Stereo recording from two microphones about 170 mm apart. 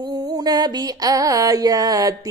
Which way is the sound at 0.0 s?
25° right (ahead or behind).